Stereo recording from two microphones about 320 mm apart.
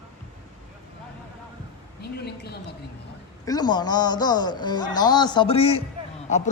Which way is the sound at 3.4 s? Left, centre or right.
Centre.